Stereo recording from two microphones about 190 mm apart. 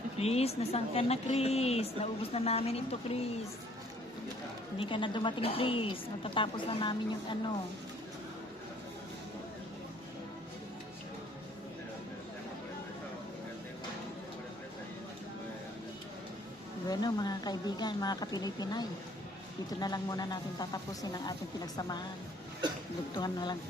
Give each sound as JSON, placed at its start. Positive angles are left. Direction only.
{"t": 0.2, "sound": "a woman's voice", "side_deg": 35}
{"t": 4.8, "sound": "a woman's voice", "side_deg": 25}
{"t": 16.9, "sound": "a woman's voice", "side_deg": 20}
{"t": 23.1, "sound": "a woman's voice", "side_deg": 20}